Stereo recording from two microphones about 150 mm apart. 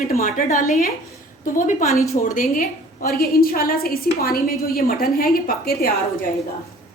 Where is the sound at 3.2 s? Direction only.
85° left.